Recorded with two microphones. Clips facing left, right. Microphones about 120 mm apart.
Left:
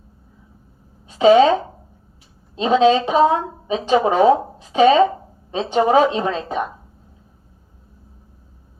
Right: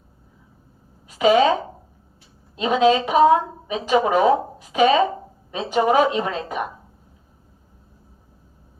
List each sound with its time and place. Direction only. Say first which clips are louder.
1.0 s a woman's voice: left 4 dB; 30° left (ahead or behind)